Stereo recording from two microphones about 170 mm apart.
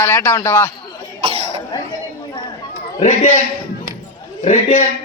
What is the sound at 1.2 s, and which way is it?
Cough, 35° right (ahead or behind).